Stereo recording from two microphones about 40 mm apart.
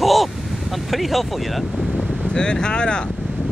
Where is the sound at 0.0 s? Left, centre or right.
Centre.